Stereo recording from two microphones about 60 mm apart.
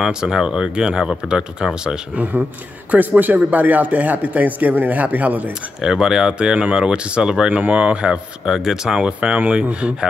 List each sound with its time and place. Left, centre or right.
0.0 s speech: centre
2.9 s a man's voice: right
5.5 s a man's voice: centre